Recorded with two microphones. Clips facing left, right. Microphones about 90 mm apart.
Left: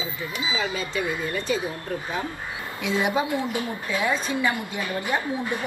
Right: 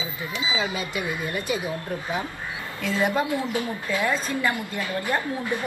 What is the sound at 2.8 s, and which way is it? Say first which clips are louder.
A woman's voice: even; 15° left (ahead or behind).